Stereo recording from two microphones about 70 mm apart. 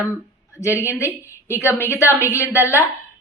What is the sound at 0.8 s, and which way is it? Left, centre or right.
A woman's voice, left.